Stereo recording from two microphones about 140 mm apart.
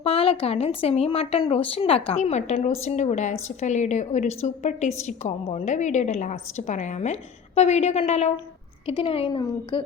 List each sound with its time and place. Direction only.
0.0 s speech: 45° left (ahead or behind)
2.1 s a woman's voice: 55° left (ahead or behind); by 9.8 s 35° left (ahead or behind)